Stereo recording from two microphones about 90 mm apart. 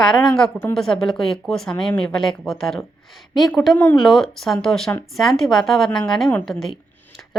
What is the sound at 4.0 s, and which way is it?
A woman's voice, 5° left (ahead or behind).